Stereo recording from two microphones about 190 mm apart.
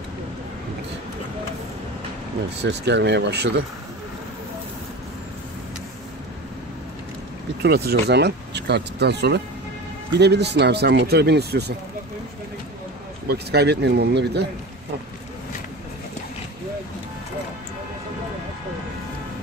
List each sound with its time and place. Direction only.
2.6 s speech: 60° right (ahead or behind)
7.6 s speech: 60° right (ahead or behind)
13.3 s speech: 60° right (ahead or behind)